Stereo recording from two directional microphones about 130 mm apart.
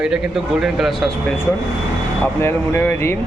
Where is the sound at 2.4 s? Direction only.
20° left (ahead or behind).